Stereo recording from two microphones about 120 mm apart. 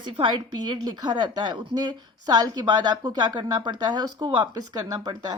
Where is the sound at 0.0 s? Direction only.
40° right (ahead or behind).